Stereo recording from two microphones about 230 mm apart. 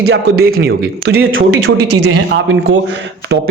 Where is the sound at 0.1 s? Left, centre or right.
Right.